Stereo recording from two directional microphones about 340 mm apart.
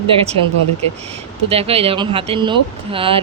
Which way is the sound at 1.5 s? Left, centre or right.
Centre.